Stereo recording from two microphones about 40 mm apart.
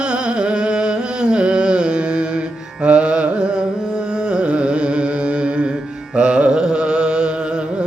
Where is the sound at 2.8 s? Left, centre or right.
Right.